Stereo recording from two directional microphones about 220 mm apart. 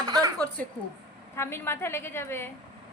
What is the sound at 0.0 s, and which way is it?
Dishes, 20° right (ahead or behind).